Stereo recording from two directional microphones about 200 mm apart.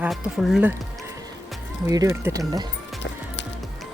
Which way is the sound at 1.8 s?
15° right (ahead or behind).